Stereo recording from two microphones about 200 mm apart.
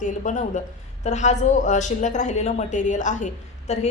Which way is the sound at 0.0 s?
40° left (ahead or behind).